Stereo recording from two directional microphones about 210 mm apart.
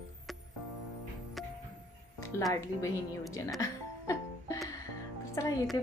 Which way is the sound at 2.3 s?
10° left (ahead or behind).